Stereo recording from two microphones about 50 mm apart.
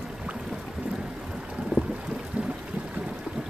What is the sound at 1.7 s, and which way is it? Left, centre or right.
Boat, right.